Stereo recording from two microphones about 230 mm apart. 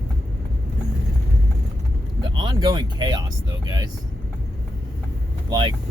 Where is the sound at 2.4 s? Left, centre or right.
Centre.